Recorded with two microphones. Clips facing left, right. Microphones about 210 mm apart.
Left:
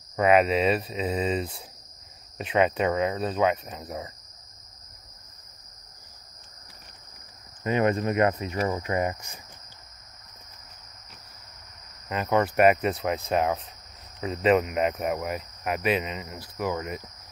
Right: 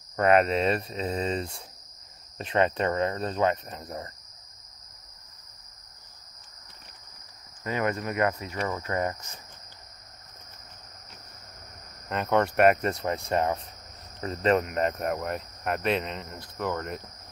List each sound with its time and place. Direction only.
0.1 s cricket: centre (ahead or behind)
7.6 s cricket: 20° left (ahead or behind)
12.1 s cricket: centre (ahead or behind)